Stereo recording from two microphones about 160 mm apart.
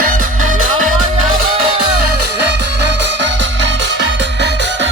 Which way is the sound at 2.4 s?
90° right.